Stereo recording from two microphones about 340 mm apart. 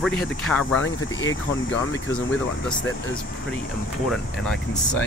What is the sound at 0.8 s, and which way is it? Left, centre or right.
Speech, left.